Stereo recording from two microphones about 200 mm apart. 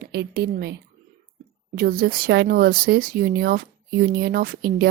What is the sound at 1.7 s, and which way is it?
A woman's voice, 50° right (ahead or behind).